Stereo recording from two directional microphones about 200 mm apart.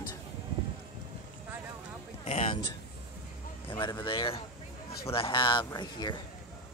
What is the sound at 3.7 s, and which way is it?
Speech, 20° left (ahead or behind).